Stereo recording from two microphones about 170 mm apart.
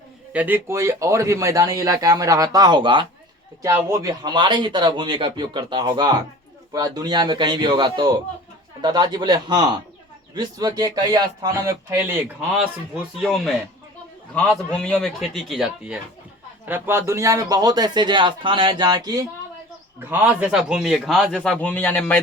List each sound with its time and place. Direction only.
0.3 s speech: 10° right (ahead or behind); by 3.1 s 30° right (ahead or behind)
3.6 s speech: 15° right (ahead or behind)
13.2 s a man's voice: centre (ahead or behind); by 19.2 s 25° right (ahead or behind)
20.0 s a man's voice: 10° right (ahead or behind); by 22.2 s 10° left (ahead or behind)